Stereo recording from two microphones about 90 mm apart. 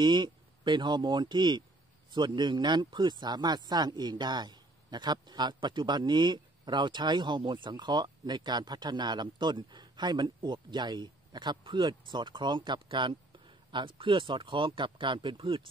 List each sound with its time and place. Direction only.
0.0 s speech: 55° right (ahead or behind)